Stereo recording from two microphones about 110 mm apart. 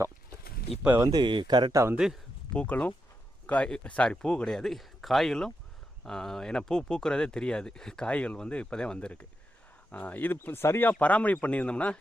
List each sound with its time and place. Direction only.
1.1 s speech: 45° right (ahead or behind)
1.7 s speech: 25° right (ahead or behind)
2.5 s speech: 10° left (ahead or behind)